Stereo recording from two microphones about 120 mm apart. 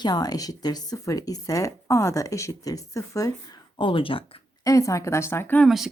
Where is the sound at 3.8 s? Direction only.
45° left (ahead or behind).